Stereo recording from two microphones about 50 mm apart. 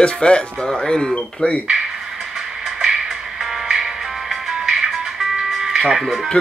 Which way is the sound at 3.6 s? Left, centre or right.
Centre.